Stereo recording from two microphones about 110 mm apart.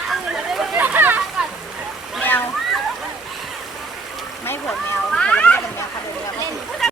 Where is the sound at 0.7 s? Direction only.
15° right (ahead or behind).